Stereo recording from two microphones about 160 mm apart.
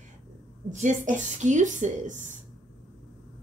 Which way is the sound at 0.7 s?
50° right (ahead or behind).